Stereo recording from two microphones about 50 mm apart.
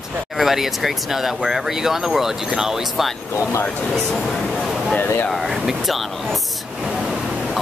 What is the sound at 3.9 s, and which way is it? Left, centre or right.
Speech, centre.